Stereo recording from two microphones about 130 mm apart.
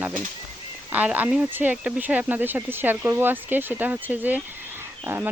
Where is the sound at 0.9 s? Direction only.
10° right (ahead or behind).